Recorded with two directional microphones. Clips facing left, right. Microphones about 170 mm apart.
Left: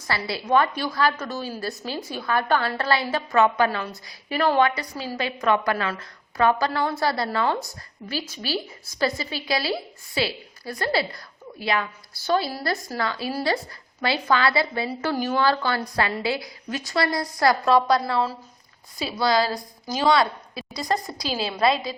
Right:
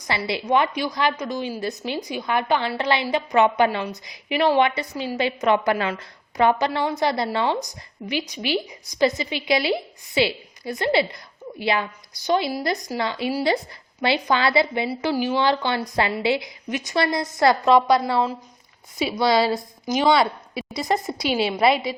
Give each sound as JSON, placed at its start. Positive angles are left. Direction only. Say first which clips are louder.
{"t": 0.2, "sound": "a woman's voice", "louder": "even", "side_deg": -20}
{"t": 14.8, "sound": "a woman's voice", "louder": "right 2 dB", "side_deg": -10}
{"t": 15.4, "sound": "a woman's voice", "louder": "right 1 dB", "side_deg": -20}